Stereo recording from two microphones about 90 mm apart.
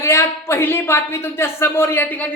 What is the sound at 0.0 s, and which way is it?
A woman's voice, 30° left (ahead or behind).